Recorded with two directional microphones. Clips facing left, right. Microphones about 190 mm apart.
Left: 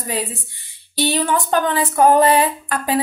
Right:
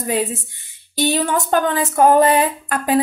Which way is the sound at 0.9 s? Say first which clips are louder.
Right 1 dB; 45° right (ahead or behind).